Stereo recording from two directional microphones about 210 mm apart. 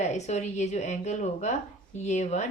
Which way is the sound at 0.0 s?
35° left (ahead or behind).